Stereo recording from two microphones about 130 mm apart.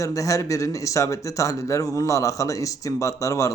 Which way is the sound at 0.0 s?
25° left (ahead or behind).